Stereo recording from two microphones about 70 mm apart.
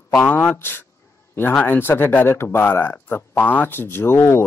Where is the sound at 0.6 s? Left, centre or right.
Left.